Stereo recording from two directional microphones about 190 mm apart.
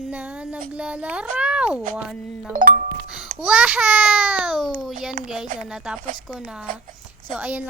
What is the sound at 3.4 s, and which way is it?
Speech, 5° right (ahead or behind).